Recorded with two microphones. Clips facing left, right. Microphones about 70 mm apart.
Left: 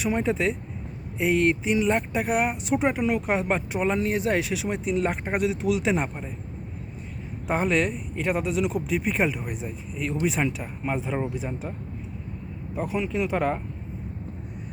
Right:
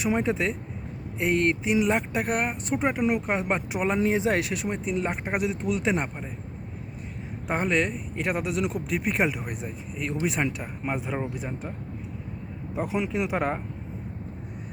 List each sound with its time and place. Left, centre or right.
0.2 s speech: centre
3.9 s speech: right
4.3 s speech: centre
7.4 s speech: centre
12.7 s speech: right